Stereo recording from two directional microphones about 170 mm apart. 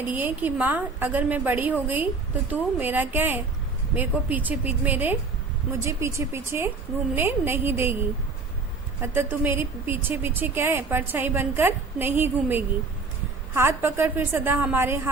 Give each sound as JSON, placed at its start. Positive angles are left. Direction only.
{"t": 0.1, "sound": "speech", "side_deg": -10}
{"t": 9.0, "sound": "speech", "side_deg": -10}